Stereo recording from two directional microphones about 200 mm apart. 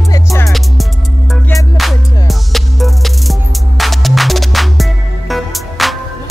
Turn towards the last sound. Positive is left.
turn(degrees=0)  # may be behind; listen again after turning